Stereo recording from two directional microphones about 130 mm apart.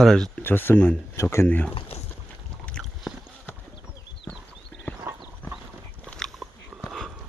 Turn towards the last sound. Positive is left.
turn(degrees=0)  # may be behind; listen again after turning